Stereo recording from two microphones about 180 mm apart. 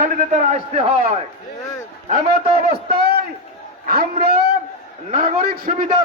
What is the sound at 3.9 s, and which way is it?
Speech, 55° right (ahead or behind).